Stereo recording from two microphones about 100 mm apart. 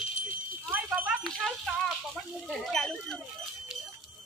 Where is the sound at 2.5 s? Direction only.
5° left (ahead or behind).